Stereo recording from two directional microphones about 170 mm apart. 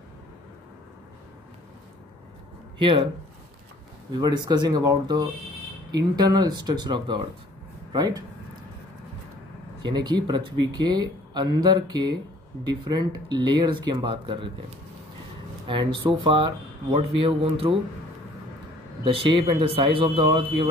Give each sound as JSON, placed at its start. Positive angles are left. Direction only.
{"t": 2.8, "sound": "speech", "side_deg": -30}
{"t": 4.1, "sound": "speech", "side_deg": -25}
{"t": 9.8, "sound": "speech", "side_deg": -25}
{"t": 15.6, "sound": "speech", "side_deg": -30}
{"t": 19.0, "sound": "speech", "side_deg": -30}